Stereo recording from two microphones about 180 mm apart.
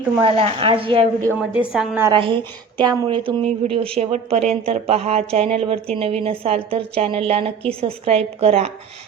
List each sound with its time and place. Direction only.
0.3 s speech: 30° right (ahead or behind)
1.4 s a woman's voice: 5° right (ahead or behind)
2.1 s a woman's voice: 25° right (ahead or behind)